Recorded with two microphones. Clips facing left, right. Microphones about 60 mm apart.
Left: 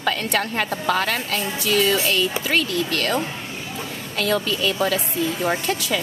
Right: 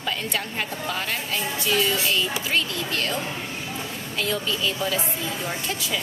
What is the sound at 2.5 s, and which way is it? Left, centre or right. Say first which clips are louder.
A woman's voice: left 4 dB; left.